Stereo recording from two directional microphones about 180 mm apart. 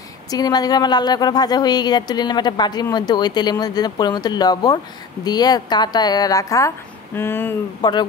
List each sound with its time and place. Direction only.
0.3 s speech: 20° left (ahead or behind)
7.8 s speech: 25° left (ahead or behind)